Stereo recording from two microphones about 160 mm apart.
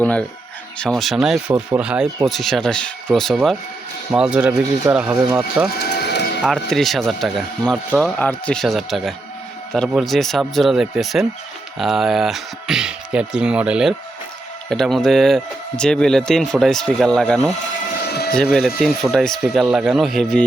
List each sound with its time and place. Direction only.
0.0 s speech: 10° left (ahead or behind)
5.7 s livestock: 80° left
6.4 s speech: centre (ahead or behind)
18.1 s a sound: 80° left
18.3 s speech: centre (ahead or behind)